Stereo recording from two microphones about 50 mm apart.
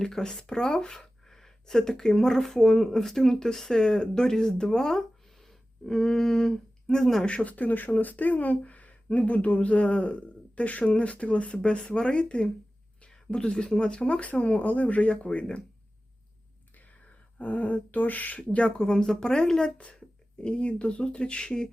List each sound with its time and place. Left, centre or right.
0.0 s speech: centre
7.3 s speech: left
13.0 s a sound: centre
13.7 s speech: centre
14.6 s speech: left
17.3 s speech: left
18.8 s speech: centre